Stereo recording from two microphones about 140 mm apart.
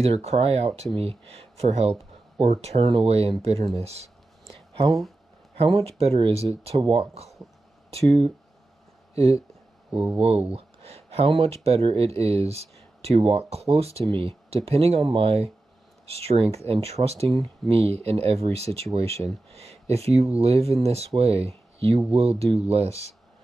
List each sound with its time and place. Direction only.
0.0 s speech: 45° right (ahead or behind)
5.6 s speech: 45° right (ahead or behind)
9.8 s speech: 10° right (ahead or behind)
10.1 s speech: 45° right (ahead or behind)